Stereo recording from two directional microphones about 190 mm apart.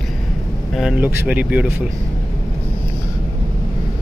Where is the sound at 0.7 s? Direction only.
5° right (ahead or behind).